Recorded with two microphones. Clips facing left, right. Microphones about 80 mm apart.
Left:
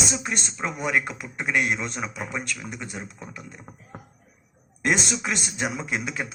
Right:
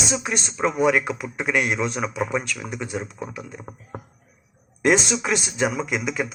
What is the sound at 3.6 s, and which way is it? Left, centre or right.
Speech, right.